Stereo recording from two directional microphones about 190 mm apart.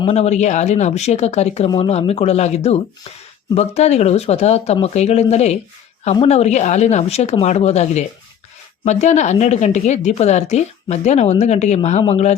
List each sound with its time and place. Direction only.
0.0 s speech: 35° left (ahead or behind)